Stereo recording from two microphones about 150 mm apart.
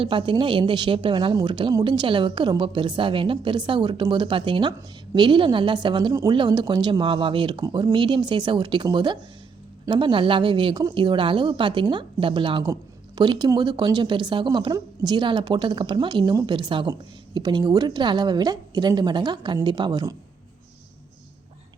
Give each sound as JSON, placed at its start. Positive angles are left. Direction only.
{"t": 0.0, "sound": "speech", "side_deg": -35}